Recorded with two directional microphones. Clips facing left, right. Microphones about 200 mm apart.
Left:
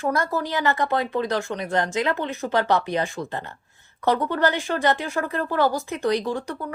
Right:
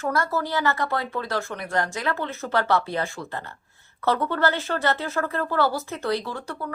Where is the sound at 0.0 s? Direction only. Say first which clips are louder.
Left 1 dB; 15° left (ahead or behind).